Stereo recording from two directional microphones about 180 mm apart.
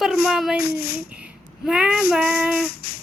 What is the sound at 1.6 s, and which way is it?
Speech, 5° right (ahead or behind).